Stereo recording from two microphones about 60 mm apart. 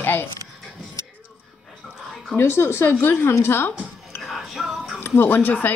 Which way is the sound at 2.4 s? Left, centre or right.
Left.